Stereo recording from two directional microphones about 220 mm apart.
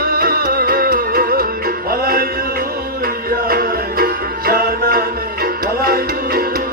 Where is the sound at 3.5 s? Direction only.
40° right (ahead or behind).